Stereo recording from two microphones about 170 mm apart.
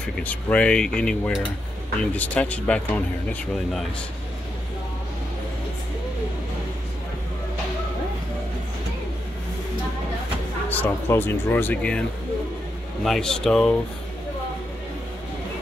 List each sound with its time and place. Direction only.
0.2 s speech: 10° left (ahead or behind)
10.7 s speech: 15° left (ahead or behind)
13.0 s speech: 5° left (ahead or behind)